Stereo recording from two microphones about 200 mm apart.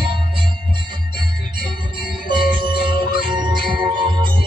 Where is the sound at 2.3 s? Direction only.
25° right (ahead or behind).